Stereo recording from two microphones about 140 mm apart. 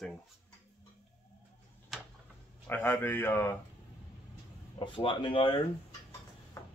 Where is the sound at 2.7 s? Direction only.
15° left (ahead or behind).